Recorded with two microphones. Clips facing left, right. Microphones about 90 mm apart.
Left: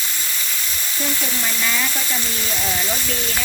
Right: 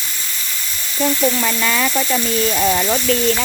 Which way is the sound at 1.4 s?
80° right.